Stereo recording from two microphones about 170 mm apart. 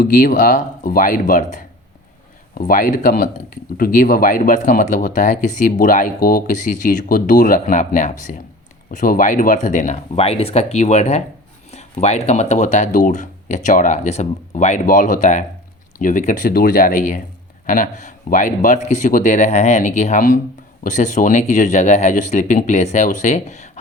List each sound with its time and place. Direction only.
0.0 s speech: 50° left (ahead or behind)